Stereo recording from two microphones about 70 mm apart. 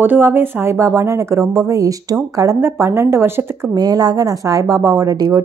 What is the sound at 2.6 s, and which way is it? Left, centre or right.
Speech, right.